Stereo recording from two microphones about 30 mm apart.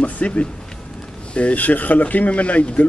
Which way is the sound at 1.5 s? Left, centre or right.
Left.